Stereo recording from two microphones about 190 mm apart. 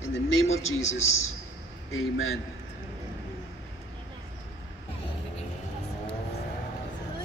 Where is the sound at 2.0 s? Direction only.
90° left.